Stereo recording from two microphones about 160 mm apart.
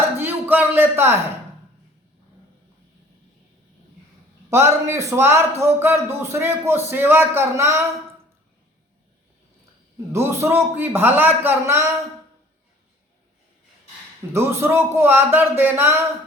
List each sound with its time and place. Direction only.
0.2 s a man's voice: 10° right (ahead or behind)
4.4 s a man's voice: 15° right (ahead or behind)
10.1 s a man's voice: 15° right (ahead or behind)
14.3 s a man's voice: 15° right (ahead or behind)